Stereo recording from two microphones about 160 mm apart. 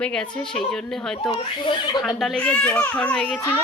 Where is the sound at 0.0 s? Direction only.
5° left (ahead or behind).